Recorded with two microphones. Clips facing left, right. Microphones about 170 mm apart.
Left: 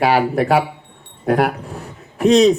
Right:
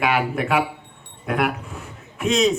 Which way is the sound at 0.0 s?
35° left (ahead or behind).